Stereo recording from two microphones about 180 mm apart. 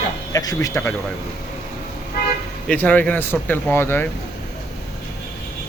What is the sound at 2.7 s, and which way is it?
Speech, 10° left (ahead or behind).